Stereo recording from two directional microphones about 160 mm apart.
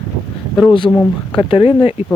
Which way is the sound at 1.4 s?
35° left (ahead or behind).